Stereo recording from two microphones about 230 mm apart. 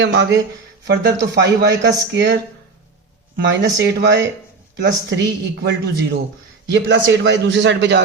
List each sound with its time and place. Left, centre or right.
0.0 s a man's voice: right
3.5 s a man's voice: right